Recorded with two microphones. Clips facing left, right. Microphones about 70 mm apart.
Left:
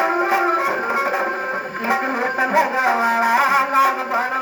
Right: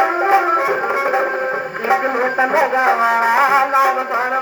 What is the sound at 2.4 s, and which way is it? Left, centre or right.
Music, right.